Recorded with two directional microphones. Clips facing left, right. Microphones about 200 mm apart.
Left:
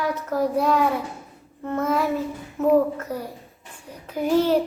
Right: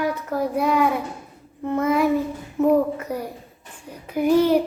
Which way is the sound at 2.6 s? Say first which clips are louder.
Right 1 dB; 15° right (ahead or behind).